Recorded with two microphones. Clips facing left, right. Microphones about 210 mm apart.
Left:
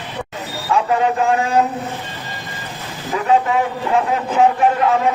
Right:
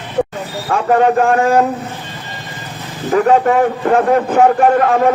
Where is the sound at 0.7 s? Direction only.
50° right (ahead or behind).